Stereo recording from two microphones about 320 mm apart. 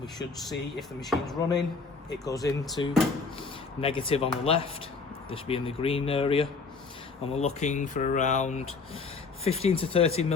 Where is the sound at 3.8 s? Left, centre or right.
Centre.